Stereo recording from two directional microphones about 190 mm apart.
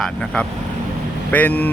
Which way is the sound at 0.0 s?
5° left (ahead or behind).